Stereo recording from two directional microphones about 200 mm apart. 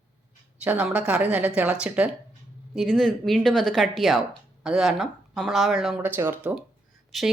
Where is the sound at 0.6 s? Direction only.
5° right (ahead or behind).